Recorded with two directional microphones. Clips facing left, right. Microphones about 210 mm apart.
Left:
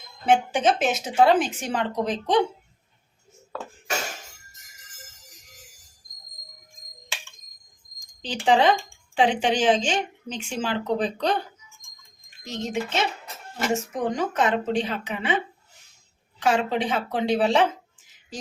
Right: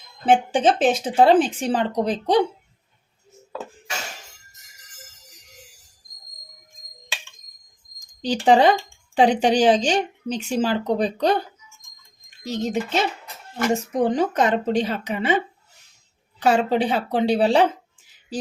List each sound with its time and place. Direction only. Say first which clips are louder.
0.3 s a woman's voice: right 3 dB; 30° right (ahead or behind)
8.2 s a woman's voice: right 4 dB; 40° right (ahead or behind)
12.5 s a woman's voice: right 4 dB; 35° right (ahead or behind)
16.4 s a woman's voice: right 4 dB; 35° right (ahead or behind)